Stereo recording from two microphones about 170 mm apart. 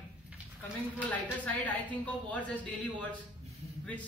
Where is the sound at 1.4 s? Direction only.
10° left (ahead or behind).